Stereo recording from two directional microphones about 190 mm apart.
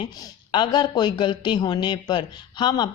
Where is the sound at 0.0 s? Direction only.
25° left (ahead or behind).